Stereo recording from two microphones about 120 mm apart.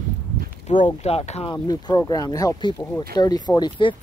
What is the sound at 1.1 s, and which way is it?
Speech, 60° left (ahead or behind).